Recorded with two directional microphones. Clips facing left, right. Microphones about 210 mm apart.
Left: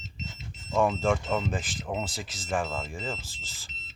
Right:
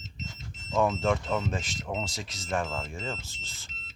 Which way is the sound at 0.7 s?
Centre (ahead or behind).